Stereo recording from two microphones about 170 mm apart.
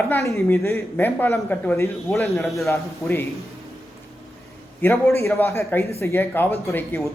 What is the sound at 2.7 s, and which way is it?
Speech, 15° left (ahead or behind).